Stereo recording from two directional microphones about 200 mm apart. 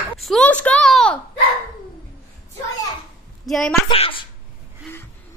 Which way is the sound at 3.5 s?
Centre (ahead or behind).